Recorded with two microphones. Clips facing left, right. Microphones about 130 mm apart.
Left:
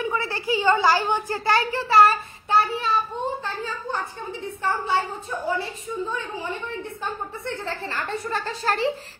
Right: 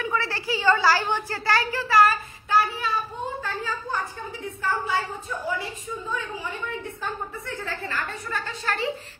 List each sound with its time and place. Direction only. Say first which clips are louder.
0.0 s a sound: left 1 dB; 25° left (ahead or behind)
4.6 s a woman's voice: left 2 dB; 25° left (ahead or behind)
7.4 s a woman's voice: left 6 dB; 30° left (ahead or behind)